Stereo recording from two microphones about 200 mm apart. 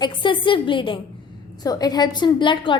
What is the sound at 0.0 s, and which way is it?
A woman's voice, 20° left (ahead or behind).